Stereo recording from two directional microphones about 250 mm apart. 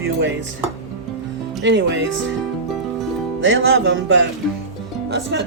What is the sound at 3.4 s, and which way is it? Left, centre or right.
Music, right.